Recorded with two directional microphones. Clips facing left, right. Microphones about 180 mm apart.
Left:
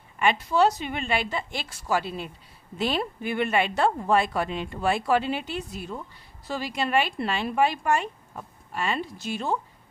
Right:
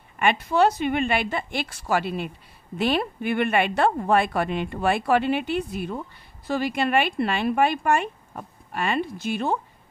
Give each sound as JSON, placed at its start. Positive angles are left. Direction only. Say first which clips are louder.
{"t": 0.2, "sound": "speech", "louder": "right 2 dB", "side_deg": -55}